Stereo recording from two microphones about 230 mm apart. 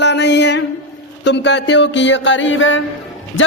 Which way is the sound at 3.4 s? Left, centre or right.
Left.